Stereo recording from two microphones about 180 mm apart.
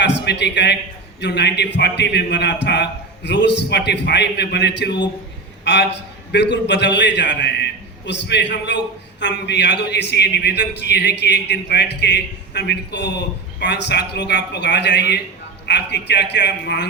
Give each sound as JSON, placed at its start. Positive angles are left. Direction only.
{"t": 0.0, "sound": "a man's voice", "side_deg": 70}